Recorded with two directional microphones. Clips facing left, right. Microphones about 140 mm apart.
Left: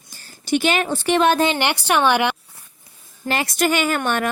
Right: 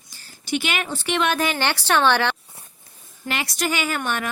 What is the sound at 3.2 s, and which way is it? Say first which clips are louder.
Speech: left 5 dB; 45° left (ahead or behind).